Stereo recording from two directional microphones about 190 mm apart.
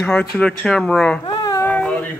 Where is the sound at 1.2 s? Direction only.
20° left (ahead or behind).